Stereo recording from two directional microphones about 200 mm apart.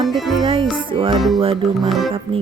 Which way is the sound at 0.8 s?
25° right (ahead or behind).